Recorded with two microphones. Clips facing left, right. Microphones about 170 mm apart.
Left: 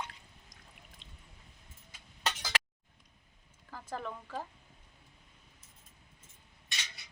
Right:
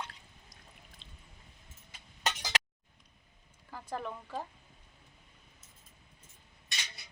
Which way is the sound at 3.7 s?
10° right (ahead or behind).